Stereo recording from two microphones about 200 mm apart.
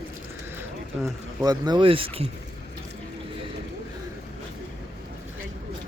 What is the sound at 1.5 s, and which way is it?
Speech, 20° right (ahead or behind).